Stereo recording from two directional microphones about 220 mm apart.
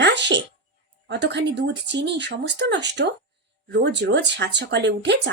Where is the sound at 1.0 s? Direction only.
50° right (ahead or behind).